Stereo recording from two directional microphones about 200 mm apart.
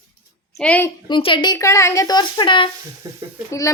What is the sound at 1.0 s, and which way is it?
A woman's voice, 25° left (ahead or behind).